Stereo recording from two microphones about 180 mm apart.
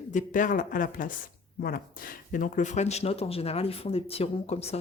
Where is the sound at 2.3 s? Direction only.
45° left (ahead or behind).